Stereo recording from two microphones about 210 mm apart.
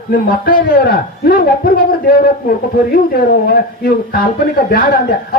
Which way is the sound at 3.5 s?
50° left (ahead or behind).